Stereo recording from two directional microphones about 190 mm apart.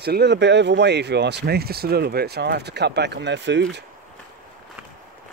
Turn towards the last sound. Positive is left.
turn(degrees=-65)  # may be behind; listen again after turning